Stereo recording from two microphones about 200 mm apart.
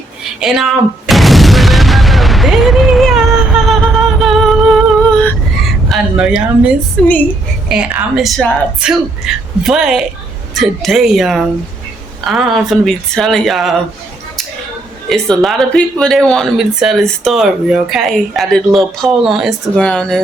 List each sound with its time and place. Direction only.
0.3 s boom: centre (ahead or behind)
5.9 s a woman's voice: 5° right (ahead or behind)
15.1 s a woman's voice: centre (ahead or behind)